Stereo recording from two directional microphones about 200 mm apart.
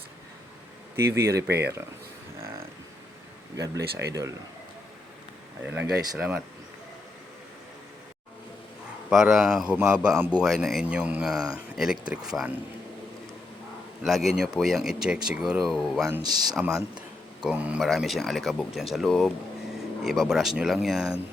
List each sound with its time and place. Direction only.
1.1 s speech: 15° right (ahead or behind)
1.5 s speech: 55° right (ahead or behind)
3.6 s speech: 55° right (ahead or behind)
5.6 s speech: 5° right (ahead or behind)
9.0 s a man's voice: 5° right (ahead or behind)
14.0 s a man's voice: centre (ahead or behind)